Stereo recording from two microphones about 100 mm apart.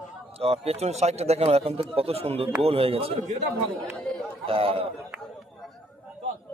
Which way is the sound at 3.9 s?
10° left (ahead or behind).